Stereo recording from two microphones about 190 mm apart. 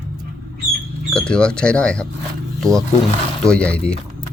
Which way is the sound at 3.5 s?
5° left (ahead or behind).